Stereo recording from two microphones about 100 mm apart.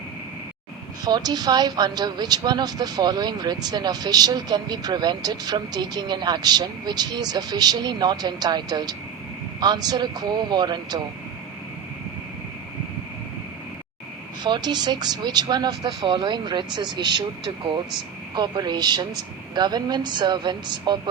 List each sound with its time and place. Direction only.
1.0 s a woman's voice: 45° right (ahead or behind)
14.4 s a woman's voice: 45° right (ahead or behind)